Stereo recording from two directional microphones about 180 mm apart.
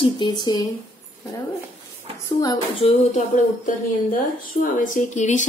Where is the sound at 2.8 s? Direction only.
35° left (ahead or behind).